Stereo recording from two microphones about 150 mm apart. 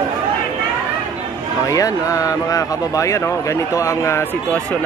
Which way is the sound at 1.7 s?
25° left (ahead or behind).